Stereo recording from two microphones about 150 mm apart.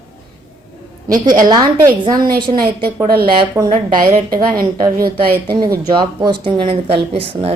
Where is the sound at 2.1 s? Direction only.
75° right (ahead or behind).